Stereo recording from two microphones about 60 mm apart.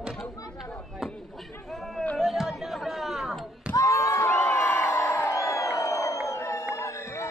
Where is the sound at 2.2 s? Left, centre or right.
Centre.